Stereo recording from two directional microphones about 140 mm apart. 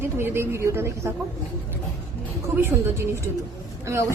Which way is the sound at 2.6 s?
20° right (ahead or behind).